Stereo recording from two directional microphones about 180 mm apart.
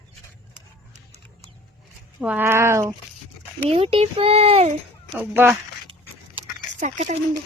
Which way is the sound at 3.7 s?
30° right (ahead or behind).